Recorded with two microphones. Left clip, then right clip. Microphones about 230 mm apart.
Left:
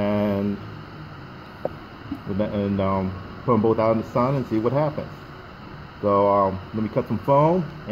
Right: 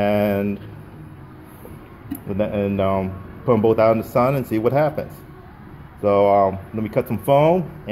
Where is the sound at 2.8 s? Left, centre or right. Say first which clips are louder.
Right 4 dB; centre.